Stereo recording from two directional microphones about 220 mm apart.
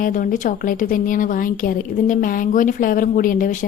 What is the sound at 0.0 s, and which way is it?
A woman's voice, 40° left (ahead or behind).